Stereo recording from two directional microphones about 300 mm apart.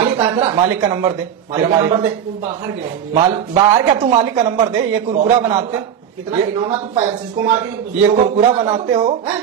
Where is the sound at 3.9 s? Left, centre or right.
Centre.